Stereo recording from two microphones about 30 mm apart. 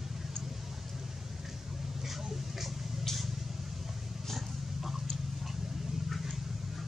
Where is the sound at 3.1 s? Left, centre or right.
Centre.